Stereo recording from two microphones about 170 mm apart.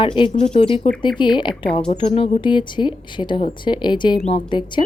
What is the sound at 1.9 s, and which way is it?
A woman's voice, 35° left (ahead or behind).